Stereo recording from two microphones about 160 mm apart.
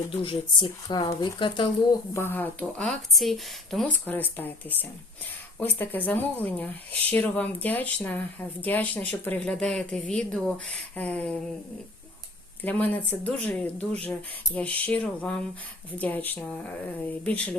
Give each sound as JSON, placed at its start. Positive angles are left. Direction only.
{"t": 0.2, "sound": "speech", "side_deg": 30}
{"t": 2.1, "sound": "speech", "side_deg": 15}
{"t": 12.6, "sound": "speech", "side_deg": 10}